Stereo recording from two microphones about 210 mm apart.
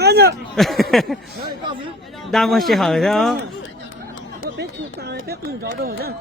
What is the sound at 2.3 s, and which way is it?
Speech, centre (ahead or behind).